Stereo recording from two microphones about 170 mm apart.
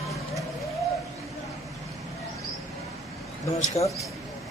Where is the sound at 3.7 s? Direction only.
20° left (ahead or behind).